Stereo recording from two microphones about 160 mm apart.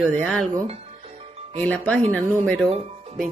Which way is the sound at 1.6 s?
10° left (ahead or behind).